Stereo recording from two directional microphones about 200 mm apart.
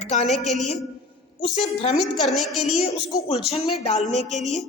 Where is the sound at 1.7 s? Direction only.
30° left (ahead or behind).